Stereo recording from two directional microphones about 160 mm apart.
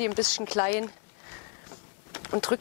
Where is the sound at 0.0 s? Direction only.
10° left (ahead or behind).